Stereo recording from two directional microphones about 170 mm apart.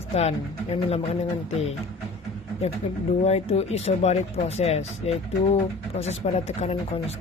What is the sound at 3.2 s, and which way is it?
Speech, 35° left (ahead or behind).